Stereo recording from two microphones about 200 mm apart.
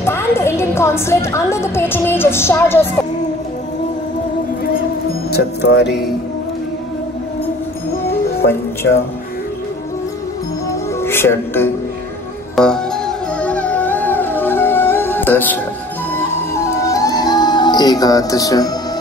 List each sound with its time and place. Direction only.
0.0 s a woman's voice: 10° left (ahead or behind)
5.3 s speech: 55° left (ahead or behind)
10.7 s music: 10° left (ahead or behind)